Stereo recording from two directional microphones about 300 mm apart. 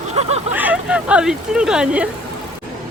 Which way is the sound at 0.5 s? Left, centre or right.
Centre.